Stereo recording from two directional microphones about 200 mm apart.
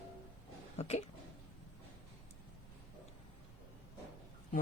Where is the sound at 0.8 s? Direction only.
30° left (ahead or behind).